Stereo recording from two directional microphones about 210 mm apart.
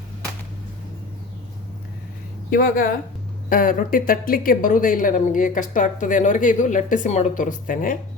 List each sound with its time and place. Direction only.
2.5 s speech: 40° left (ahead or behind)